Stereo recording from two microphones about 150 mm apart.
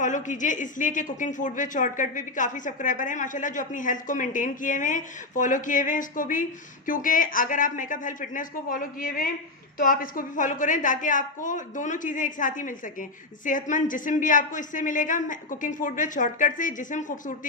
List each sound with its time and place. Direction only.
0.0 s a woman's voice: 55° left (ahead or behind)